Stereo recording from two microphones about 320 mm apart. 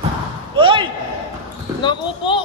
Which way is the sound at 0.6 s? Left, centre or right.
Centre.